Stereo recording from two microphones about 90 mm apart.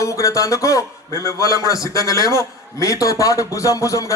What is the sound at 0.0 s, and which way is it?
A man's voice, 35° left (ahead or behind).